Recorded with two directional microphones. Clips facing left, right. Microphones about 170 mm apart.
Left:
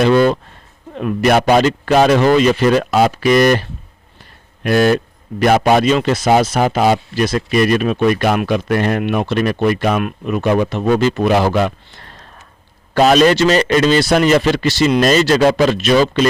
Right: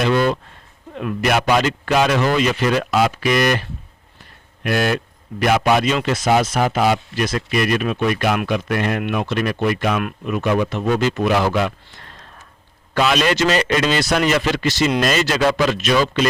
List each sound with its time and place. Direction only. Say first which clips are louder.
0.0 s a sound: left 5 dB; 40° left (ahead or behind)
0.9 s a man's voice: left 5 dB; 35° left (ahead or behind)
10.2 s a man's voice: left 3 dB; 40° left (ahead or behind)